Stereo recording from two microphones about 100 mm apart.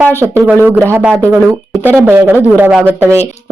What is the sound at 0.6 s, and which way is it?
Speech, 25° right (ahead or behind).